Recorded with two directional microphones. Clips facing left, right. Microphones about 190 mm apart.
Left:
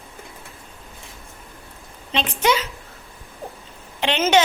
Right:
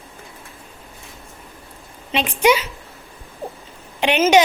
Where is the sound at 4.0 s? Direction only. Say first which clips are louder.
Right 4 dB; 15° right (ahead or behind).